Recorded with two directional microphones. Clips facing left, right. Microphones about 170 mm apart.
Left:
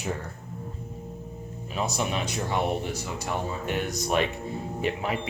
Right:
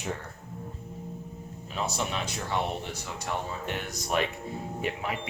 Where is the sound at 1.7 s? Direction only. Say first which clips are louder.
Left 3 dB; 15° left (ahead or behind).